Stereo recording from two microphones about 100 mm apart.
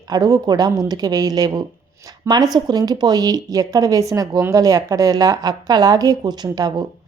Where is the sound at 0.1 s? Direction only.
40° right (ahead or behind).